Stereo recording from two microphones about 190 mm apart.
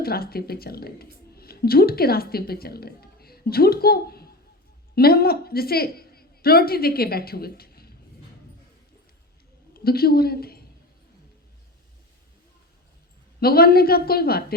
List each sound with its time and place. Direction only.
0.0 s a woman's voice: 55° left (ahead or behind)
9.7 s a woman's voice: 55° left (ahead or behind)
13.4 s a woman's voice: 55° left (ahead or behind)